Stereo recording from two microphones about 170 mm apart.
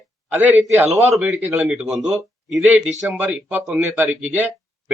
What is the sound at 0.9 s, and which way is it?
Speech, centre (ahead or behind).